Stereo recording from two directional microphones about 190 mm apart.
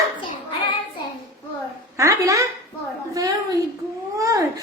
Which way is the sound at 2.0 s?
15° right (ahead or behind).